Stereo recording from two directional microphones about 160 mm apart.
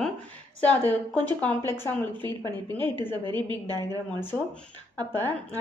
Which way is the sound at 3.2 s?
30° right (ahead or behind).